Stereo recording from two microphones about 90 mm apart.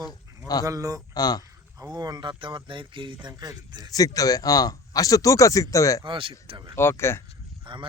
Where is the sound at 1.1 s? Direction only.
45° left (ahead or behind).